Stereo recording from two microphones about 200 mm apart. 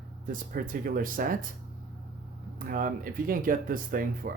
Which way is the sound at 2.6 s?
45° right (ahead or behind).